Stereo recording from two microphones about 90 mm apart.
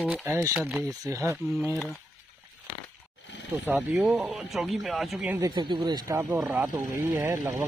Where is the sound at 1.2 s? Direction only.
25° right (ahead or behind).